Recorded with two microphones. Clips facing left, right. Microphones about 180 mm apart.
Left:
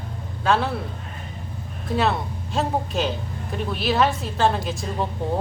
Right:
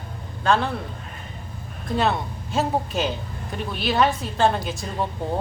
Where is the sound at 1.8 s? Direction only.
Centre (ahead or behind).